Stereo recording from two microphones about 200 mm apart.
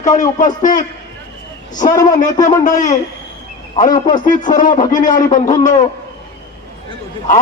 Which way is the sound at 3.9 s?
20° left (ahead or behind).